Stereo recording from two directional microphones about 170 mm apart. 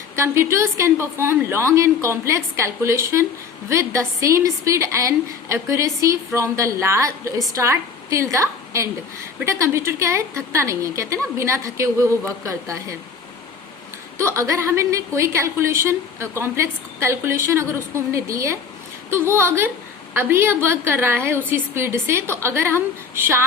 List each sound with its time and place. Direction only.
0.2 s a woman's voice: 15° right (ahead or behind)
14.2 s a woman's voice: 15° right (ahead or behind)